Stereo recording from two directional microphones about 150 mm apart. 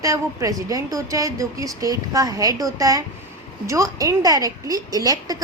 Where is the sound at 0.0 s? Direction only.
20° right (ahead or behind).